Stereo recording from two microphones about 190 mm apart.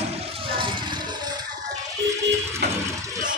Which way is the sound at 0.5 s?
25° right (ahead or behind).